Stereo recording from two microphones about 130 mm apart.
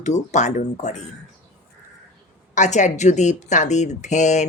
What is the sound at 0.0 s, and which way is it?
Speech, 65° left (ahead or behind).